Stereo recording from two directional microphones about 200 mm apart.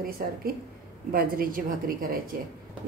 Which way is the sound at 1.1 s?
45° right (ahead or behind).